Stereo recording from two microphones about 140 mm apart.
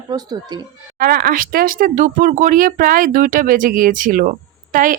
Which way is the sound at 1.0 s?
90° right.